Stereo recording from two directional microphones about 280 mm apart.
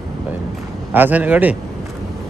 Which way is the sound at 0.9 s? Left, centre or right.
Centre.